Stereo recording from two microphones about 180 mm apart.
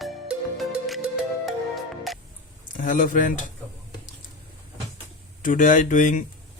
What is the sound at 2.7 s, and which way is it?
Speech, 50° left (ahead or behind).